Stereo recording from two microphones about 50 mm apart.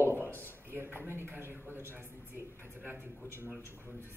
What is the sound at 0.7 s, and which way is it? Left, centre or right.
Speech, right.